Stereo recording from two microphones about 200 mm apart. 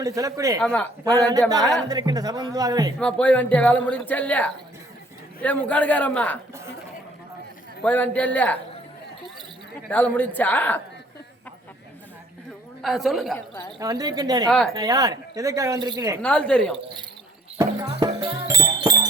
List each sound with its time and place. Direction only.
0.0 s a woman's voice: 15° right (ahead or behind)
0.6 s a woman's voice: 5° left (ahead or behind)
1.0 s speech: 20° right (ahead or behind)
3.0 s a woman's voice: 5° left (ahead or behind)
7.9 s a woman's voice: 10° left (ahead or behind)
9.9 s a woman's voice: 10° left (ahead or behind)
12.8 s a woman's voice: centre (ahead or behind)
13.7 s a woman's voice: 20° right (ahead or behind)
16.2 s a woman's voice: 5° left (ahead or behind)
18.0 s music: 20° right (ahead or behind)